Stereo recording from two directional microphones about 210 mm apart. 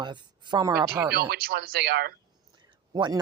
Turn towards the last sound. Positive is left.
turn(degrees=-20)  # may be behind; listen again after turning